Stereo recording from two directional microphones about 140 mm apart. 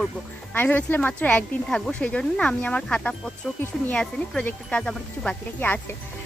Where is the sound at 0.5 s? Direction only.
15° left (ahead or behind).